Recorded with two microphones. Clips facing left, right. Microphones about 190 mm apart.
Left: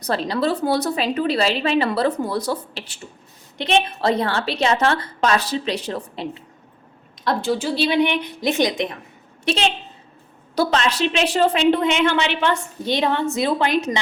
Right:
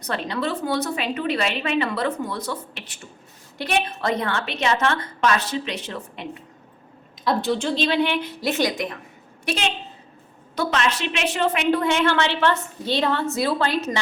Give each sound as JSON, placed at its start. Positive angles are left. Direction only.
{"t": 0.0, "sound": "a woman's voice", "side_deg": 35}
{"t": 7.3, "sound": "a woman's voice", "side_deg": 0}
{"t": 9.4, "sound": "a woman's voice", "side_deg": 30}